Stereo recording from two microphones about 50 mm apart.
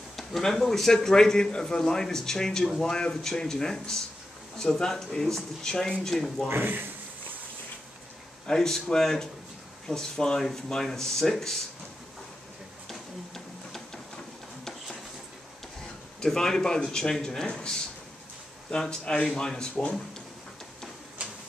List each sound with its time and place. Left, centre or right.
0.1 s a man's voice: centre
6.5 s speech: right
8.5 s a man's voice: centre
12.8 s printer: centre
16.2 s a man's voice: centre